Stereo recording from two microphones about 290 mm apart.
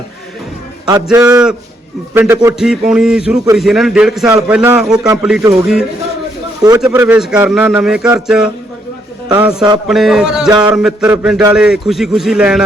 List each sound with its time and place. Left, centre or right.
1.0 s a man's voice: centre